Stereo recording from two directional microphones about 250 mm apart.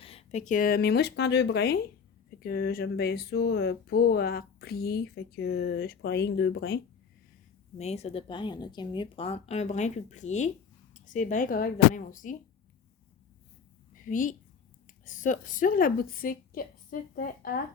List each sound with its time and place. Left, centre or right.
0.0 s speech: left
7.8 s speech: left
13.9 s a sound: left
15.0 s speech: left